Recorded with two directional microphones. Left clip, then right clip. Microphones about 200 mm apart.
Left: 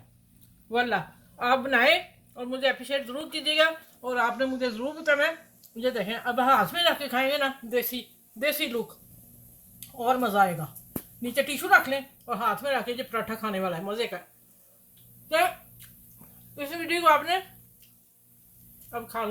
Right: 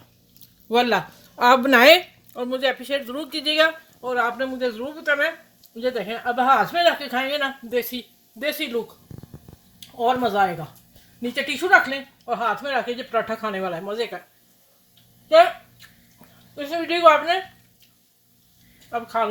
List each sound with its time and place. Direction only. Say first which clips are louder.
0.7 s speech: right 7 dB; 50° right (ahead or behind)
4.0 s a woman's voice: right 3 dB; 30° right (ahead or behind); by 8.6 s 15° right (ahead or behind)
10.0 s speech: right 3 dB; 15° right (ahead or behind)
11.7 s speech: right 4 dB; 15° right (ahead or behind)
16.6 s speech: right 6 dB; 5° right (ahead or behind)
18.9 s speech: right 8 dB; 15° right (ahead or behind)